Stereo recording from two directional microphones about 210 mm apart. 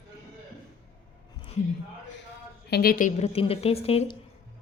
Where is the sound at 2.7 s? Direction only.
45° left (ahead or behind); by 4.1 s 25° left (ahead or behind).